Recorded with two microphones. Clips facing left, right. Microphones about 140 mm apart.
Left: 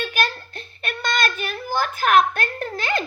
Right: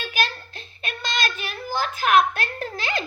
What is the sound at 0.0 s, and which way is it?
Child singing, 55° left (ahead or behind).